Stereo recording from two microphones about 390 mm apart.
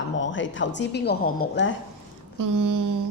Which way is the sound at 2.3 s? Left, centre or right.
Right.